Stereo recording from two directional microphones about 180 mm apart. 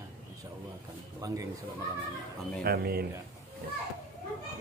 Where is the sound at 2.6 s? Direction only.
60° right (ahead or behind).